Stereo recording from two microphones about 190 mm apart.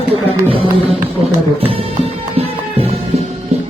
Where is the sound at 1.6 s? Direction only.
30° right (ahead or behind).